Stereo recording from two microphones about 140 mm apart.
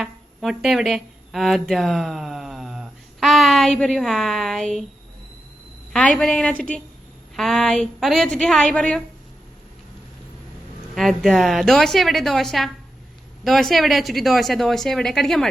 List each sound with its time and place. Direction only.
0.0 s speech: centre (ahead or behind)
5.9 s a woman's voice: 5° left (ahead or behind)
10.9 s a woman's voice: centre (ahead or behind)